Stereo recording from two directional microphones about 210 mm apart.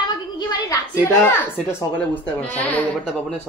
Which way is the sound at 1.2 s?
10° left (ahead or behind).